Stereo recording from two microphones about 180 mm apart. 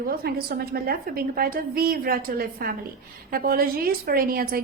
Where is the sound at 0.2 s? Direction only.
60° right (ahead or behind).